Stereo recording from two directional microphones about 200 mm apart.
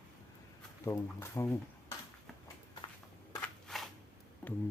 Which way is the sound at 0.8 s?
10° left (ahead or behind).